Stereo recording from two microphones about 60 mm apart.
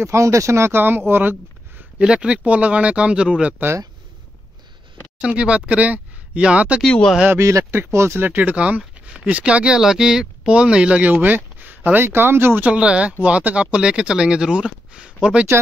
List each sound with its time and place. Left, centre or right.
0.0 s speech: right
2.0 s speech: centre
5.2 s speech: centre
7.3 s speech: right
7.7 s speech: right
8.2 s speech: right
9.8 s speech: centre; by 12.6 s right
12.6 s speech: centre
15.5 s speech: right